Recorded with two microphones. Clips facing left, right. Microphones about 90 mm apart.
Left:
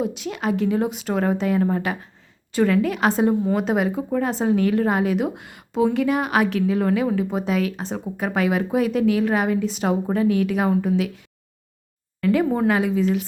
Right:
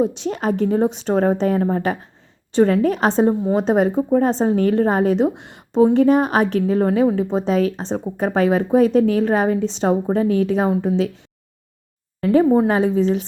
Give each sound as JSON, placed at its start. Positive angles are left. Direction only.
{"t": 0.0, "sound": "a woman's voice", "side_deg": -35}
{"t": 12.2, "sound": "a woman's voice", "side_deg": -35}